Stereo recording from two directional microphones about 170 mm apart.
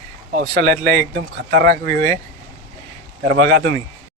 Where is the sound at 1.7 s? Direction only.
50° right (ahead or behind).